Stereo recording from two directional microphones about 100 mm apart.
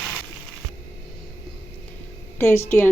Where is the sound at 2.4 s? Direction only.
25° left (ahead or behind).